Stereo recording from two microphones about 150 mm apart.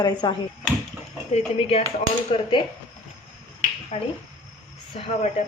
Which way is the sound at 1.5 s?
45° left (ahead or behind).